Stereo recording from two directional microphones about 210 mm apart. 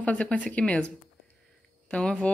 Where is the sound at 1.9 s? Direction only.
5° left (ahead or behind).